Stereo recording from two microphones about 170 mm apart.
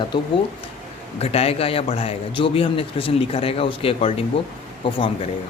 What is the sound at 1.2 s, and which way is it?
Speech, 35° left (ahead or behind).